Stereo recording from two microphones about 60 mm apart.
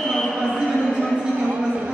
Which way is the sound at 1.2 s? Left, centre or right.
Centre.